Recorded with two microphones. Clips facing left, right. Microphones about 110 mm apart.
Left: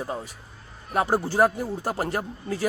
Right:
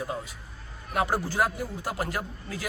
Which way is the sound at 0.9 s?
30° left (ahead or behind).